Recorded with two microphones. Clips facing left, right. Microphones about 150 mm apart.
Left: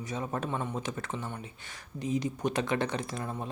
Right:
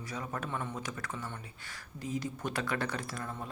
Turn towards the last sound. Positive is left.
turn(degrees=20)  # may be behind; listen again after turning